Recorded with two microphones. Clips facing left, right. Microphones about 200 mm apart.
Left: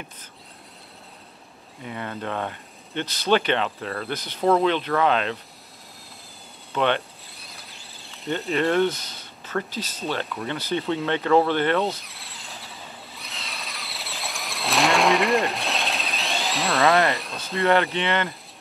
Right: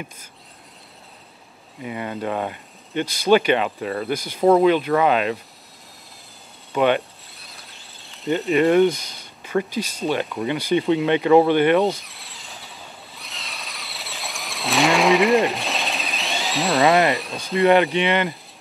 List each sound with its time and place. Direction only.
1.8 s speech: 10° right (ahead or behind)
6.7 s speech: 10° right (ahead or behind)
7.5 s a sound: centre (ahead or behind)
8.5 s speech: 15° right (ahead or behind)
12.0 s vehicle: centre (ahead or behind)
17.1 s speech: centre (ahead or behind)
17.6 s speech: 15° right (ahead or behind)